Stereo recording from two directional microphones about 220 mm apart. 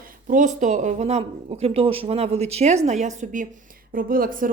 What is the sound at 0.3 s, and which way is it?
Speech, 35° right (ahead or behind).